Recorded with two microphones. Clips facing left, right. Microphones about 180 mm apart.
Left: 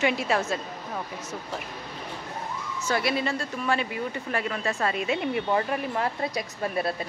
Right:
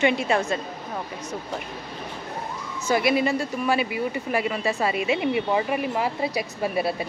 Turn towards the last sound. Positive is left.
turn(degrees=-10)  # may be behind; listen again after turning